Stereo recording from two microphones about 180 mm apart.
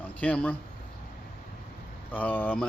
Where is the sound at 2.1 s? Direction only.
10° left (ahead or behind).